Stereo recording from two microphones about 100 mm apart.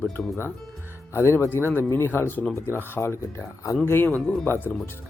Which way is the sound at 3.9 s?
20° left (ahead or behind).